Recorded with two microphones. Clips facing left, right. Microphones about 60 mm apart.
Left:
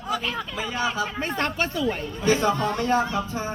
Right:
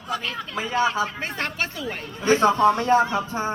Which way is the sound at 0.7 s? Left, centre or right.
Right.